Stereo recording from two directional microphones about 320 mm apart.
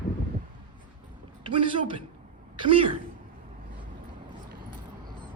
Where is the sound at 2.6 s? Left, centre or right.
Centre.